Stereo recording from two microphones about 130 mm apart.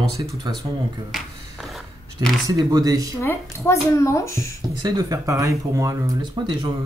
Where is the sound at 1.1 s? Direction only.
Centre (ahead or behind).